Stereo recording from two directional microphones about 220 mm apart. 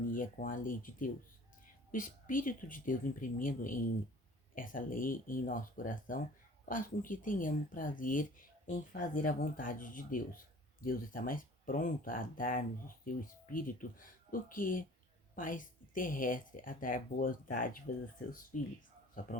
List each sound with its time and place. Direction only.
0.0 s speech: 40° left (ahead or behind)